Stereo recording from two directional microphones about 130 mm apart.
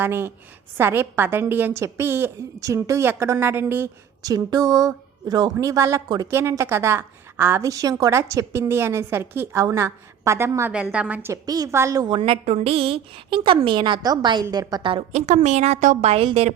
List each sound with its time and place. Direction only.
0.0 s a woman's voice: 15° right (ahead or behind)
4.2 s a woman's voice: 30° right (ahead or behind)
10.7 s a woman's voice: 10° right (ahead or behind)
11.3 s a woman's voice: 30° right (ahead or behind)
12.1 s a woman's voice: 45° right (ahead or behind)
15.1 s a woman's voice: 65° right (ahead or behind)